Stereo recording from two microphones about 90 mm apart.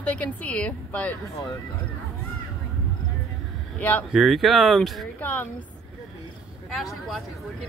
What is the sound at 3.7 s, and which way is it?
Speech, 20° left (ahead or behind).